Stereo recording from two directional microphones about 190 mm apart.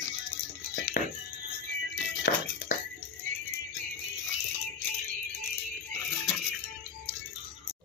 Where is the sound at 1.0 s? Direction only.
50° left (ahead or behind).